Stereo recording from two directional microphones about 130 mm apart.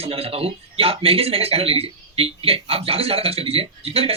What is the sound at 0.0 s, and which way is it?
Speech, 50° right (ahead or behind).